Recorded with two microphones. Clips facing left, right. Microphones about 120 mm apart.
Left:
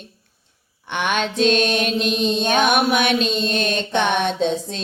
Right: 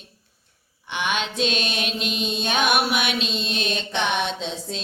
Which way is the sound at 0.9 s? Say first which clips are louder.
Left 4 dB; 50° left (ahead or behind).